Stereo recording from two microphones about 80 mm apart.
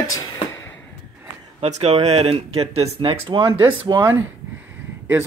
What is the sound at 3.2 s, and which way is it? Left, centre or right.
Speech, right.